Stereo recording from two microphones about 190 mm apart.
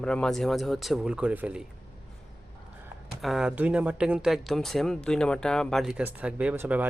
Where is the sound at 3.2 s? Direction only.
Centre (ahead or behind).